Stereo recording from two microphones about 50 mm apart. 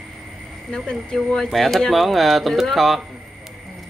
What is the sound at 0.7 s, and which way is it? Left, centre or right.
Speech, centre.